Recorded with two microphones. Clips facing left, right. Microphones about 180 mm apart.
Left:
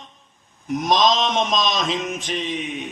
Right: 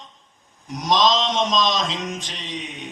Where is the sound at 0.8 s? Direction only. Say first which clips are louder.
Even; 50° left (ahead or behind).